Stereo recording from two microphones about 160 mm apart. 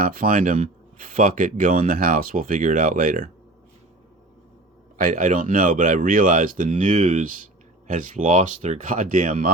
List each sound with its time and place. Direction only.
0.0 s speech: 65° right (ahead or behind)
4.9 s speech: 60° right (ahead or behind)